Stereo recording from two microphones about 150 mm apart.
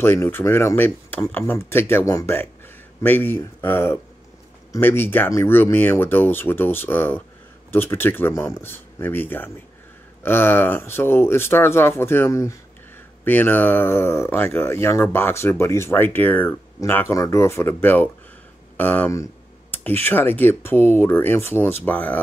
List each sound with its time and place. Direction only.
0.0 s speech: 15° left (ahead or behind)